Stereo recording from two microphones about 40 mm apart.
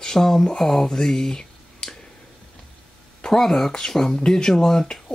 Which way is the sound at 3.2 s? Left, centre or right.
Centre.